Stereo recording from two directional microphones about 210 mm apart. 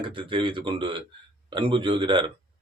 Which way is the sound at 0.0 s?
25° right (ahead or behind).